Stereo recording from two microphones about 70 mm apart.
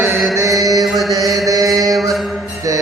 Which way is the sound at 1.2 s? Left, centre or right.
Right.